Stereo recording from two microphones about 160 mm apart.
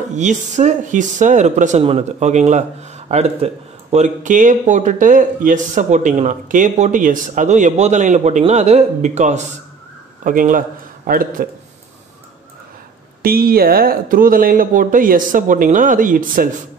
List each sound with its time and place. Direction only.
0.1 s speech: 50° right (ahead or behind)
13.2 s speech: 65° right (ahead or behind)